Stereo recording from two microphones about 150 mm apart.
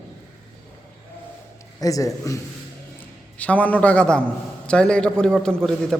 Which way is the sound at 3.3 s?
10° left (ahead or behind).